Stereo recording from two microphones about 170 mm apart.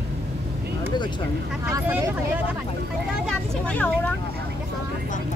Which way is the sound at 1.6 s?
15° right (ahead or behind).